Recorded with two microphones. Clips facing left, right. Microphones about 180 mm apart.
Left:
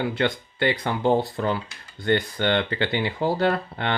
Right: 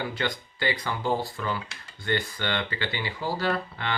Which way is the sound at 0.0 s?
60° left (ahead or behind).